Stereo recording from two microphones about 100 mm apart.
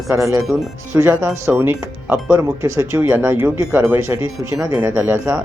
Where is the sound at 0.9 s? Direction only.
30° right (ahead or behind).